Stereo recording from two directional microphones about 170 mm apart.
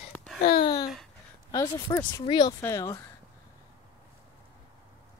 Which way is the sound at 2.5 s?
15° left (ahead or behind).